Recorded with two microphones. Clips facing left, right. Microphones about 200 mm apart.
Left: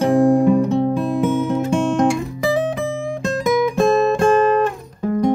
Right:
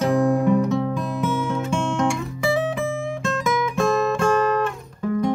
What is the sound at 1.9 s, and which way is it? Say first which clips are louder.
Guitar: left 5 dB; 35° left (ahead or behind).